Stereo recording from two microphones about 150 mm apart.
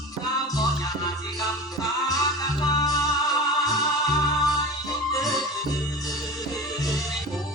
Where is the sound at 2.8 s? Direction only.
25° left (ahead or behind).